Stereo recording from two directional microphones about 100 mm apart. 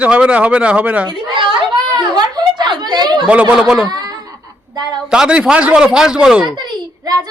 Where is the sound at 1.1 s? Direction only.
55° right (ahead or behind).